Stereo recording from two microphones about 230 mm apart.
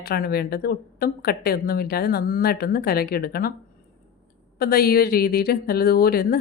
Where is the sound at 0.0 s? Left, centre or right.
Left.